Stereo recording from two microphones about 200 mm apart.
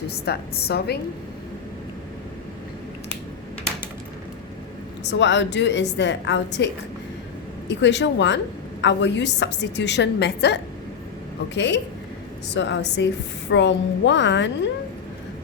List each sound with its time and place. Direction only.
0.1 s a woman's voice: 55° left (ahead or behind)
5.0 s a woman's voice: 60° left (ahead or behind)
7.7 s a woman's voice: 60° left (ahead or behind)